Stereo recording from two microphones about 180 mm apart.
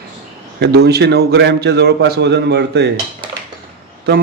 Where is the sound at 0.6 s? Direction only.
60° right (ahead or behind).